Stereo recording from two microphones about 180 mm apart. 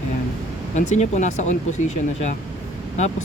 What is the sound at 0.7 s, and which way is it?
Speech, 40° left (ahead or behind).